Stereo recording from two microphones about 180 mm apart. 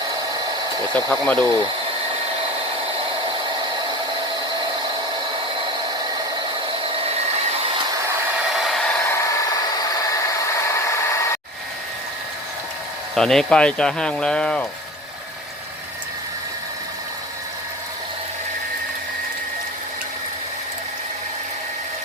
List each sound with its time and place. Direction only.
1.1 s speech: 5° left (ahead or behind)
8.5 s hair dryer: centre (ahead or behind); by 11.3 s 15° left (ahead or behind)
13.1 s speech: centre (ahead or behind)